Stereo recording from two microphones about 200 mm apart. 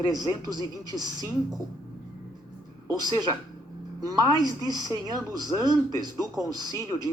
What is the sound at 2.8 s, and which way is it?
A man's voice, 20° right (ahead or behind).